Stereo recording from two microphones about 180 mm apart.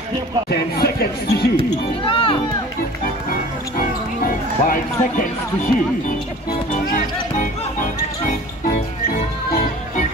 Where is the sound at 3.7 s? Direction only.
50° left (ahead or behind).